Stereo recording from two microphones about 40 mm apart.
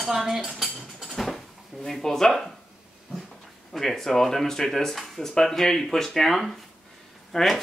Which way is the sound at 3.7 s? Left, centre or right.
Centre.